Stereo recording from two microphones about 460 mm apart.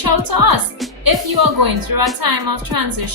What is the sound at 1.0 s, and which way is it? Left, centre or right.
A woman's voice, right.